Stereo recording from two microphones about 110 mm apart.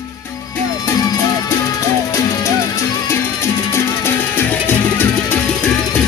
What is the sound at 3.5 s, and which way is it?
Music, 25° left (ahead or behind).